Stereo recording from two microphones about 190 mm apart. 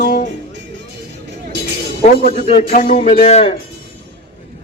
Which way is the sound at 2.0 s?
35° left (ahead or behind).